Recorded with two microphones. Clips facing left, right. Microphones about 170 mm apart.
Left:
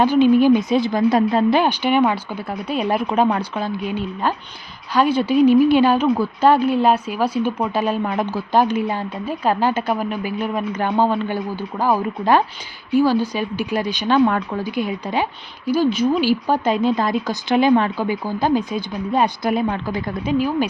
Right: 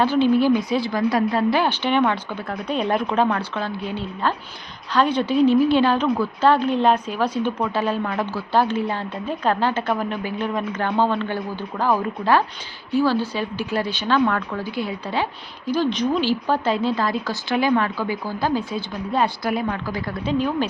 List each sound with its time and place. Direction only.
0.0 s a woman's voice: 15° left (ahead or behind)